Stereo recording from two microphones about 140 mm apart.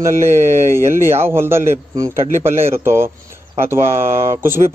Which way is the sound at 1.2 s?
15° right (ahead or behind).